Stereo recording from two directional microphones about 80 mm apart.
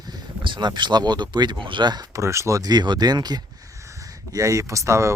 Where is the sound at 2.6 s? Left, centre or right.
Right.